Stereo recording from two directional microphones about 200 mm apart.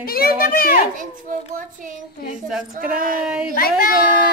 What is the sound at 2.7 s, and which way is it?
Speech, 45° right (ahead or behind).